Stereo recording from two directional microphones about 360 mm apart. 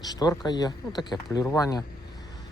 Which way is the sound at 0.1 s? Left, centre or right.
Centre.